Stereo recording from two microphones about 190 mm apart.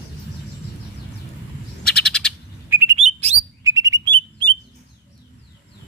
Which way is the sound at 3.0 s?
35° right (ahead or behind).